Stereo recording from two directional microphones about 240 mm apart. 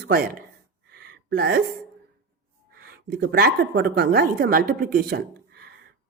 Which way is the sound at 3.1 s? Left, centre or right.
Right.